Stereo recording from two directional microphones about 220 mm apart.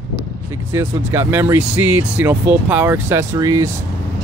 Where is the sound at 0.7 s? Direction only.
10° right (ahead or behind).